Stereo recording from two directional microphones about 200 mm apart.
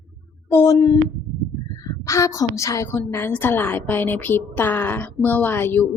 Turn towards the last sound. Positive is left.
turn(degrees=10)  # may be behind; listen again after turning